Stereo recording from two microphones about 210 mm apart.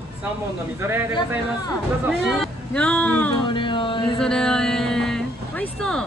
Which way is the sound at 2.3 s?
5° left (ahead or behind).